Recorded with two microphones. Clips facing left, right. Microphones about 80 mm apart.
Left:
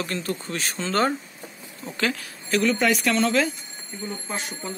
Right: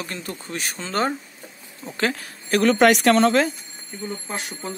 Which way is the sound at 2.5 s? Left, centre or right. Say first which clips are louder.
Right 5 dB; right.